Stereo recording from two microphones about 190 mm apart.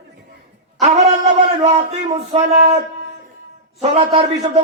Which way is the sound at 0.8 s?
35° right (ahead or behind).